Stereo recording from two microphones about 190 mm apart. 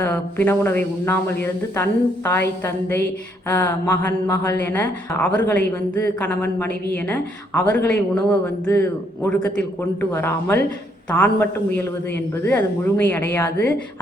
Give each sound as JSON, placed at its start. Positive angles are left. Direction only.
{"t": 0.0, "sound": "speech", "side_deg": 10}
{"t": 3.5, "sound": "speech", "side_deg": 10}